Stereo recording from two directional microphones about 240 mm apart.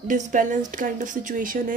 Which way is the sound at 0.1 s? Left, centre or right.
Right.